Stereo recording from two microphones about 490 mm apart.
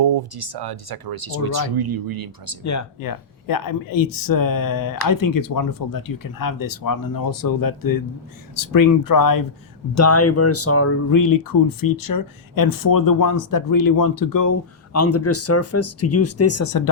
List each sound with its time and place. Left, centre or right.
0.0 s speech: right
2.6 s speech: left
9.9 s speech: left
14.9 s speech: left